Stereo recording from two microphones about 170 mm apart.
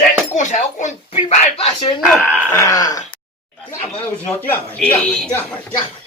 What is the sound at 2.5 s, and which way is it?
Groan, 20° left (ahead or behind).